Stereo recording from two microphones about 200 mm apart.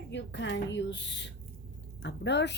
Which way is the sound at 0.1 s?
60° left (ahead or behind).